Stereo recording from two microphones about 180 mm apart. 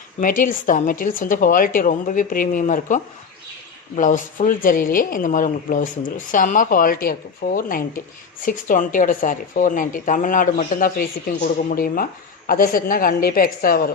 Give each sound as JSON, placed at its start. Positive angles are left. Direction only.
{"t": 0.2, "sound": "speech", "side_deg": 50}